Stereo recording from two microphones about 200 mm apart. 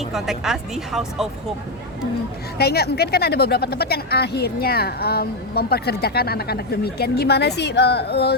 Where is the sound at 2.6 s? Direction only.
50° left (ahead or behind).